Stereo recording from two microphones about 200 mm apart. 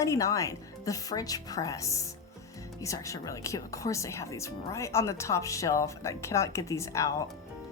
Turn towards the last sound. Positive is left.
turn(degrees=15)  # may be behind; listen again after turning